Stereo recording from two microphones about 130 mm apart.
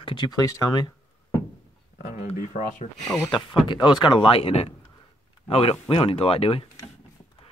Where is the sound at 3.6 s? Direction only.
35° left (ahead or behind).